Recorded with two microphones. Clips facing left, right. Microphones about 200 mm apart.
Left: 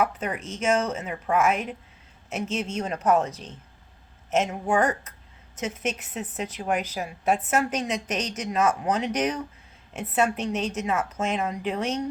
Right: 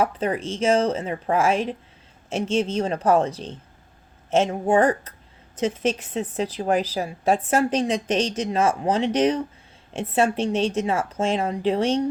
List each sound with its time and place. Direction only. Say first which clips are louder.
0.0 s a woman's voice: right 4 dB; 30° right (ahead or behind)